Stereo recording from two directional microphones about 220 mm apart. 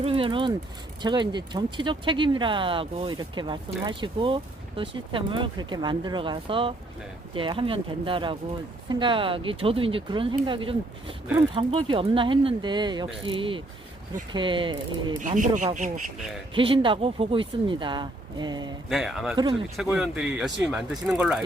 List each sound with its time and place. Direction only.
0.0 s speech: 25° right (ahead or behind)
15.2 s speech: 35° right (ahead or behind)
16.6 s speech: 25° right (ahead or behind)
18.9 s speech: centre (ahead or behind)